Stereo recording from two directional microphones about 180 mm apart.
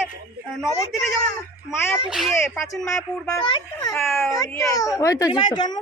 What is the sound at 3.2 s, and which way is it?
A child's voice, 25° left (ahead or behind).